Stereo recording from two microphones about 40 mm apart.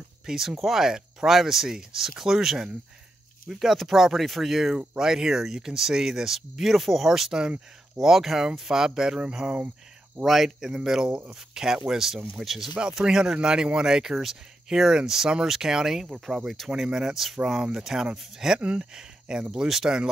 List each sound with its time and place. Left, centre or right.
0.3 s speech: centre
10.2 s speech: centre
13.0 s speech: right
16.4 s speech: centre
16.7 s speech: centre
18.6 s speech: right